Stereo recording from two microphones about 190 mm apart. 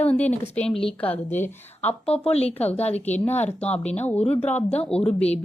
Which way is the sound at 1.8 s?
35° left (ahead or behind).